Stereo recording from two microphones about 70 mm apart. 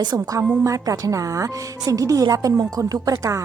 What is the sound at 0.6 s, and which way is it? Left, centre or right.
A woman's voice, right.